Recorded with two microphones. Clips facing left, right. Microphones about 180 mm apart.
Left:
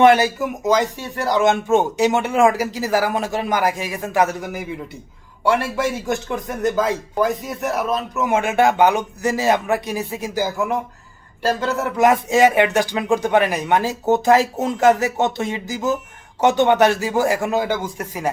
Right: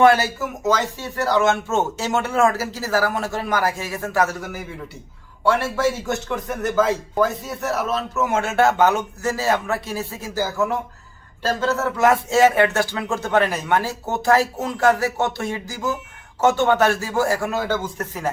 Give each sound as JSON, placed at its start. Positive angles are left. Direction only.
{"t": 0.0, "sound": "speech", "side_deg": 20}